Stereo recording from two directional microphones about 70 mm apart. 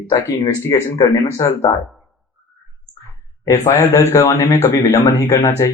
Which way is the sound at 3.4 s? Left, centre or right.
Left.